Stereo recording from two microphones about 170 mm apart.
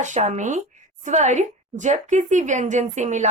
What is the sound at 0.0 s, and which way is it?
A woman's voice, 45° right (ahead or behind).